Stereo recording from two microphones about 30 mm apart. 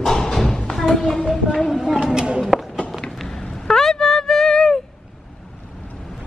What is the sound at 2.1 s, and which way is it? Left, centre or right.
Speech, right.